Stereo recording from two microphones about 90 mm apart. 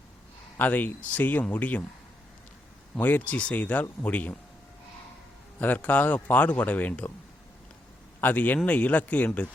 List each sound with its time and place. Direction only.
0.5 s speech: 20° left (ahead or behind)
2.9 s speech: 20° left (ahead or behind)
5.5 s speech: 20° left (ahead or behind)
8.2 s speech: 20° left (ahead or behind)